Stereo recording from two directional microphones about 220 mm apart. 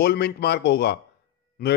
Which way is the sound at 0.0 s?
45° left (ahead or behind).